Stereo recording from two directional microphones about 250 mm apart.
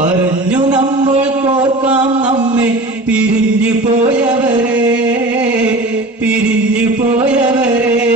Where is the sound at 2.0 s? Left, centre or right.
Centre.